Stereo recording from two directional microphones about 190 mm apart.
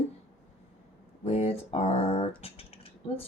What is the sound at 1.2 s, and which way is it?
Speech, 35° left (ahead or behind).